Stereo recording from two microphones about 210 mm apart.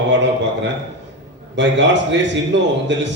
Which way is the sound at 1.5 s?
60° right (ahead or behind).